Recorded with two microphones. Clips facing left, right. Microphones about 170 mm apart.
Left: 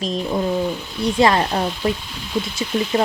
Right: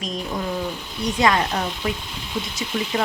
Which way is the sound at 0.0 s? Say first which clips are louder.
Left 6 dB; 30° left (ahead or behind).